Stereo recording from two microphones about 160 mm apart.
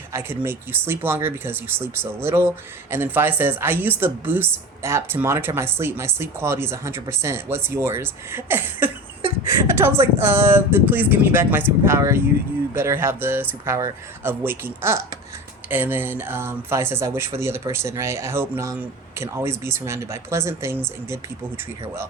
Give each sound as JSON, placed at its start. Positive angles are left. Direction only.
{"t": 0.1, "sound": "speech", "side_deg": -15}